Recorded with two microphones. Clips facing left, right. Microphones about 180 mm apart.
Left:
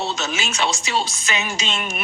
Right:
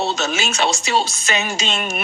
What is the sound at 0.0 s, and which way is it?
Music, 75° right (ahead or behind).